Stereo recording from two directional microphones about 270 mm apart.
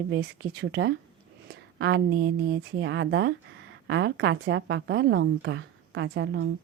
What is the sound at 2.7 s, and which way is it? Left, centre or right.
A woman's voice, right.